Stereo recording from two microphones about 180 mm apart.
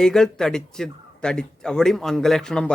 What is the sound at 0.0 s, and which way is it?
A man's voice, 5° left (ahead or behind).